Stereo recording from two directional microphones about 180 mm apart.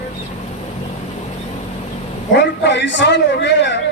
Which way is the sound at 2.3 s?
75° left (ahead or behind).